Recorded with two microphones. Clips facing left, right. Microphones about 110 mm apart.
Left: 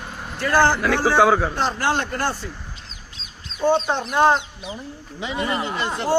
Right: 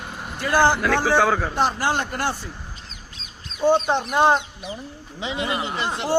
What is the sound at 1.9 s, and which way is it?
Speech, 5° right (ahead or behind).